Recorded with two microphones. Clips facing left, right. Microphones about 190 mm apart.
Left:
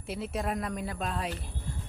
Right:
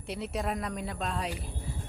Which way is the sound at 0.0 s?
Centre (ahead or behind).